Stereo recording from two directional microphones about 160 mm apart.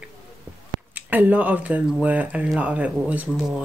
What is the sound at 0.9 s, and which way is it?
Speech, 10° right (ahead or behind).